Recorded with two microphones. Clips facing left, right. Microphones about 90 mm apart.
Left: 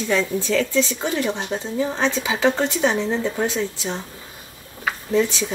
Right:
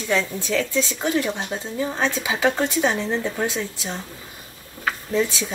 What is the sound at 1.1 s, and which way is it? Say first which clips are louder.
Speech: even; 20° left (ahead or behind).